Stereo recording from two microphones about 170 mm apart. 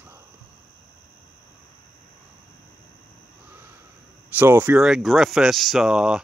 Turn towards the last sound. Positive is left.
turn(degrees=-5)  # may be behind; listen again after turning